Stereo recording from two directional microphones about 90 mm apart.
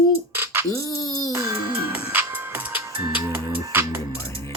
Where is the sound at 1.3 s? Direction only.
25° right (ahead or behind).